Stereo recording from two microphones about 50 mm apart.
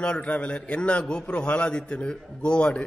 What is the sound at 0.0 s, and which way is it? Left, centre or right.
A man's voice, left.